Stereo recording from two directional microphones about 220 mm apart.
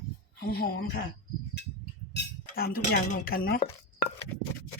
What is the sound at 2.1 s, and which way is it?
Speech, 45° left (ahead or behind).